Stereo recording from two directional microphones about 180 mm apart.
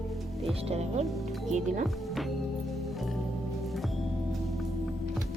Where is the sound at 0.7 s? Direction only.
35° right (ahead or behind).